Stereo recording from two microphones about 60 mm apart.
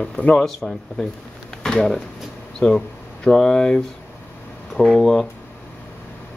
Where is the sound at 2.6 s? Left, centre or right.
Centre.